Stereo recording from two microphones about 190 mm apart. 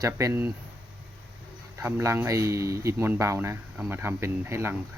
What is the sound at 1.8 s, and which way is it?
Speech, 10° right (ahead or behind).